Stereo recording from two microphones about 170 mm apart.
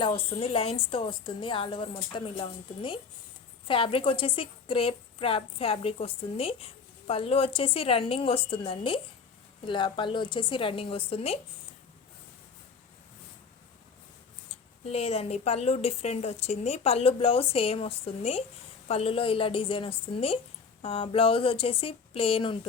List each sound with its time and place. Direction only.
0.0 s a woman's voice: 30° left (ahead or behind)
14.8 s speech: 40° left (ahead or behind)